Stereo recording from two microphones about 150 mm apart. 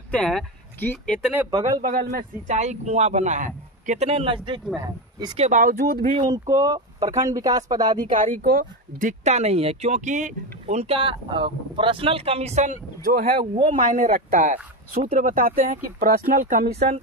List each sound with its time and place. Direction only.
0.1 s speech: 5° left (ahead or behind)
1.5 s speech: 25° right (ahead or behind)
1.9 s a man's voice: 85° right
2.4 s speech: 50° right (ahead or behind)
5.4 s speech: 60° right (ahead or behind); by 6.0 s 80° right
6.1 s speech: 25° right (ahead or behind)
8.1 s speech: 75° right (ahead or behind)
9.2 s speech: 45° right (ahead or behind)
13.9 s speech: 60° right (ahead or behind); by 16.9 s 80° right